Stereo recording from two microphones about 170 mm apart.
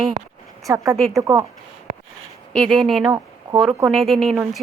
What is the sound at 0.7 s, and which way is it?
Speech, 20° right (ahead or behind).